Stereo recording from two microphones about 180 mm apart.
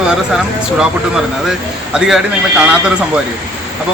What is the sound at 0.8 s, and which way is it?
A man's voice, 5° right (ahead or behind).